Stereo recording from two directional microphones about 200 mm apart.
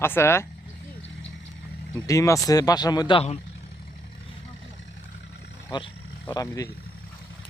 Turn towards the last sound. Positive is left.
turn(degrees=15)  # may be behind; listen again after turning